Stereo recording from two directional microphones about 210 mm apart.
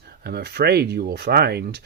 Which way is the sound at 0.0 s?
50° right (ahead or behind).